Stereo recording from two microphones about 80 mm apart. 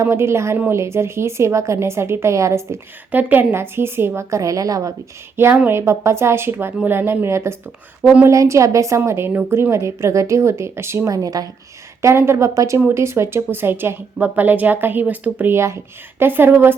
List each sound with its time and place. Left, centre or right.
0.0 s a woman's voice: right
3.1 s a woman's voice: right
5.6 s a woman's voice: right
9.0 s a woman's voice: right
12.0 s a woman's voice: right
15.5 s speech: right